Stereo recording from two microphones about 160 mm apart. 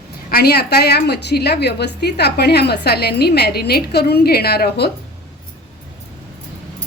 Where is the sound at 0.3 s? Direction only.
75° left (ahead or behind).